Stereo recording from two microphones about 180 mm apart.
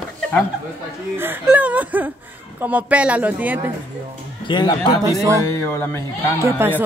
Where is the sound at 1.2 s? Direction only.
10° right (ahead or behind).